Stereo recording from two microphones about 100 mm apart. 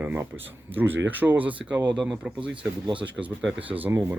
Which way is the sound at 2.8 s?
55° right (ahead or behind).